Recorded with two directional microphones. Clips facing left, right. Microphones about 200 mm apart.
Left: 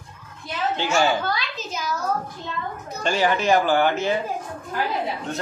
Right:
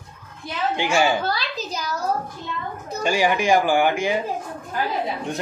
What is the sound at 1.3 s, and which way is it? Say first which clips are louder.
Speech: right 2 dB; 35° right (ahead or behind).